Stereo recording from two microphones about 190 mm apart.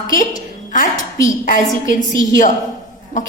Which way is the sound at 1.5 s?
45° left (ahead or behind).